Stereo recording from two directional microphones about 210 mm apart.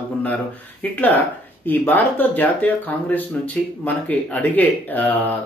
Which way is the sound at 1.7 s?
10° left (ahead or behind).